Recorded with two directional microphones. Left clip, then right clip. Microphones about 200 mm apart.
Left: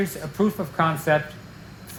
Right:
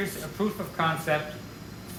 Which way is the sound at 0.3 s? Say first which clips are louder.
Left 6 dB; 40° left (ahead or behind).